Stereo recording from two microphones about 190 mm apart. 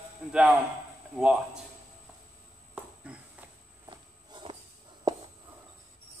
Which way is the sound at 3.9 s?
25° right (ahead or behind).